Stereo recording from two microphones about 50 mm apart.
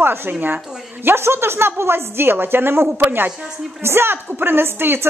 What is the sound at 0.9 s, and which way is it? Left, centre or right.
A woman's voice, right.